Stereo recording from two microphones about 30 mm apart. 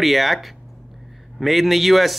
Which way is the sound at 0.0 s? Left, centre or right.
Centre.